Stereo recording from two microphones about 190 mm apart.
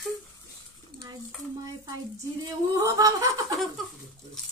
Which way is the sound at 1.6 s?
20° right (ahead or behind).